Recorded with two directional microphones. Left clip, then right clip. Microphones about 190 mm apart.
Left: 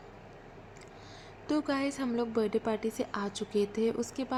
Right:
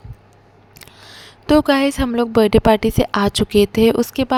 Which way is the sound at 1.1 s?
50° right (ahead or behind).